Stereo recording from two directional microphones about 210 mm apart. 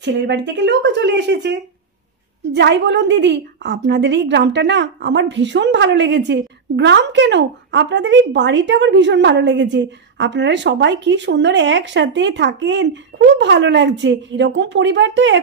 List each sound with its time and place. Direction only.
0.0 s a woman's voice: 55° right (ahead or behind)